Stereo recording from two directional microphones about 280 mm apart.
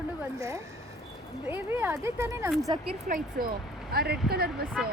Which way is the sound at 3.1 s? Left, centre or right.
Right.